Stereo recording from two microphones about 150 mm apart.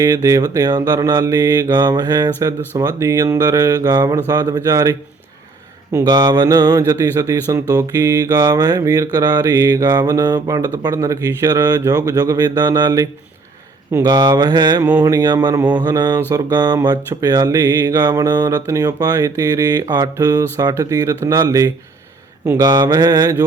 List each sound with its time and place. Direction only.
0.0 s mantra: 20° right (ahead or behind)